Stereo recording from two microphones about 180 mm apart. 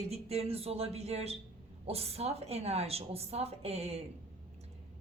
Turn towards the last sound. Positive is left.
turn(degrees=-35)  # may be behind; listen again after turning